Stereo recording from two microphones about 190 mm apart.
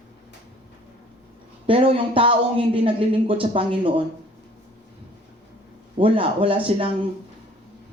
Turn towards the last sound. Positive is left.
turn(degrees=-30)  # may be behind; listen again after turning